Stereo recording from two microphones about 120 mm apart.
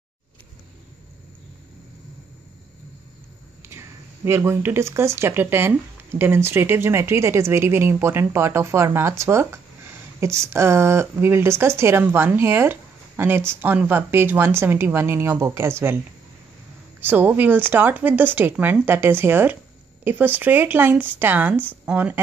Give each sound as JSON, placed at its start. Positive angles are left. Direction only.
{"t": 3.6, "sound": "speech", "side_deg": -20}
{"t": 17.0, "sound": "speech", "side_deg": -15}